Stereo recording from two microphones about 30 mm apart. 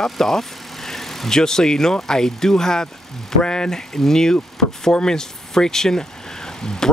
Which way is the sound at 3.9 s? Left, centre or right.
Centre.